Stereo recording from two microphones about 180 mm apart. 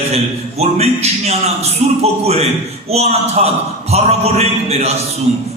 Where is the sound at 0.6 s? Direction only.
35° right (ahead or behind).